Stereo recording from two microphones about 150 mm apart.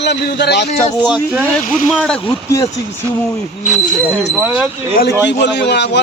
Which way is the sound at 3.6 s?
5° right (ahead or behind).